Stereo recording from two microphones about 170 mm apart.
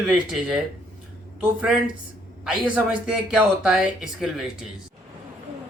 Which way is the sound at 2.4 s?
5° right (ahead or behind).